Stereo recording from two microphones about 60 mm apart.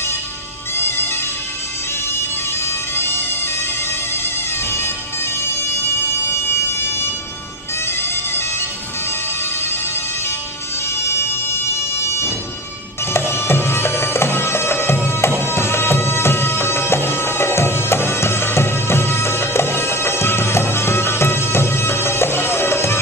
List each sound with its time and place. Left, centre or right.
0.7 s music: left
2.6 s bagpipes: left
4.1 s music: left
6.2 s a sound: left
7.8 s bagpipes: left
9.4 s music: left
12.0 s bagpipes: left
15.4 s music: left